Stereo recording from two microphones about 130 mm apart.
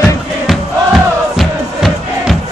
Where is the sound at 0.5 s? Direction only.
Centre (ahead or behind).